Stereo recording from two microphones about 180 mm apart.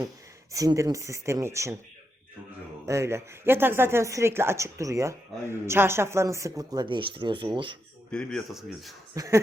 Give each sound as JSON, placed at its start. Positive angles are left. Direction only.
{"t": 0.5, "sound": "speech", "side_deg": -20}
{"t": 2.8, "sound": "speech", "side_deg": -15}
{"t": 8.1, "sound": "speech", "side_deg": 5}
{"t": 9.1, "sound": "speech", "side_deg": -15}